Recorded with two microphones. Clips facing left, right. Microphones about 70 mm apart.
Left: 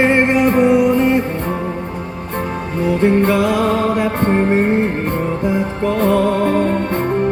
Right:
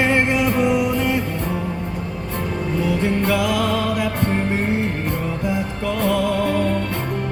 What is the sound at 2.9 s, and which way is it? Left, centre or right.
Music, left.